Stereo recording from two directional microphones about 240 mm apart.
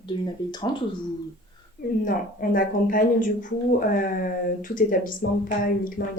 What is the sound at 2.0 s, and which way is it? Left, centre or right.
Speech, left.